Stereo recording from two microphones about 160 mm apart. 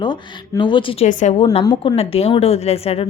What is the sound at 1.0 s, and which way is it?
Speech, 50° left (ahead or behind).